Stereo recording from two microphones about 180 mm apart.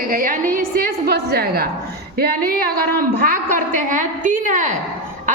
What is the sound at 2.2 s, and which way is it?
A woman's voice, 55° right (ahead or behind).